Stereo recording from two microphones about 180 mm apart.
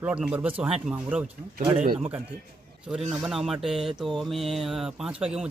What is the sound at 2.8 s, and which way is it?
Mantra, centre (ahead or behind).